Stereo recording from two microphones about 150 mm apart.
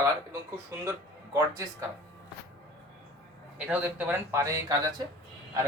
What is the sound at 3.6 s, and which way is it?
Speech, 10° right (ahead or behind).